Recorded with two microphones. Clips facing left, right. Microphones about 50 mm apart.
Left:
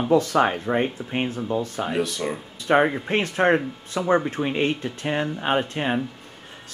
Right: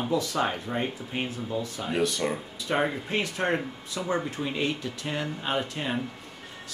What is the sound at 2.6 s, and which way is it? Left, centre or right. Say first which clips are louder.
Speech: left 8 dB; left.